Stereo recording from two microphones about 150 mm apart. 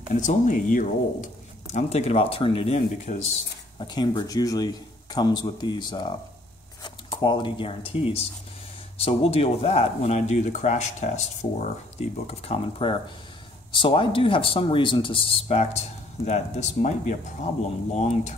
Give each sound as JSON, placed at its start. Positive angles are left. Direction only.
{"t": 0.1, "sound": "speech", "side_deg": 60}
{"t": 3.7, "sound": "a man's voice", "side_deg": 30}